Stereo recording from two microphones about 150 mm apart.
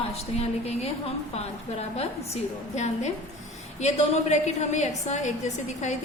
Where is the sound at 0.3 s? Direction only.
45° left (ahead or behind).